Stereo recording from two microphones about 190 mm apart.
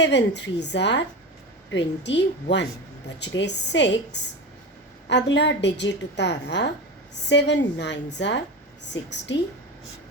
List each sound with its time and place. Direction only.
0.0 s a woman's voice: 65° left (ahead or behind)